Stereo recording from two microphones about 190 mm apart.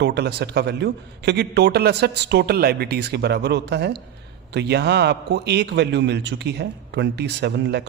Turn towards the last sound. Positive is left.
turn(degrees=-65)  # may be behind; listen again after turning